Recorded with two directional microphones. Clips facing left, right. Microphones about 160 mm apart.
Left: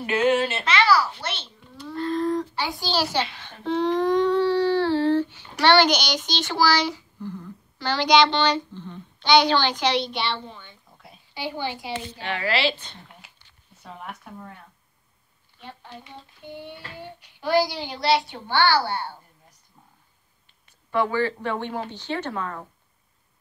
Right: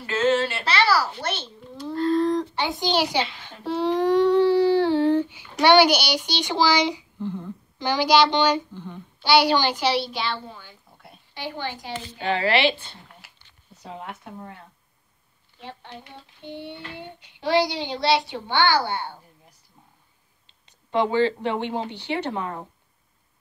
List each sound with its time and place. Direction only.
0.0 s a child's voice: 15° left (ahead or behind)
0.7 s babbling: 35° right (ahead or behind)
2.5 s a child's voice: 20° right (ahead or behind); by 11.9 s 10° left (ahead or behind)
12.2 s a child's voice: 30° right (ahead or behind); by 13.3 s 10° right (ahead or behind)
13.8 s a child's voice: 25° right (ahead or behind)
16.4 s a child's voice: 25° right (ahead or behind)
20.4 s speech: 20° right (ahead or behind)